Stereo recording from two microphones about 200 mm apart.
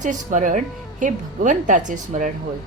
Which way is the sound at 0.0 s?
40° right (ahead or behind).